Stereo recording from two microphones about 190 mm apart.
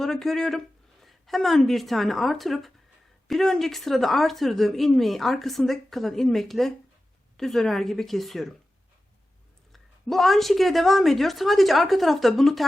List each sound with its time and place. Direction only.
0.0 s speech: centre (ahead or behind)
9.7 s speech: centre (ahead or behind)